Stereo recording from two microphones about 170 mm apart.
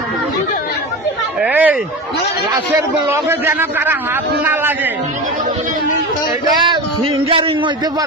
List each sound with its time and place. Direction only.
1.4 s a sound: 10° right (ahead or behind)
3.1 s a man's voice: 15° right (ahead or behind)
6.6 s a man's voice: 30° right (ahead or behind)